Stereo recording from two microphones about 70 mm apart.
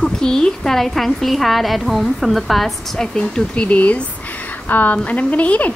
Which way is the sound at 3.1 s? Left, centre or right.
Centre.